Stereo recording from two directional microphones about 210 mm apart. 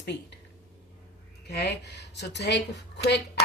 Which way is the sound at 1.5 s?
50° left (ahead or behind).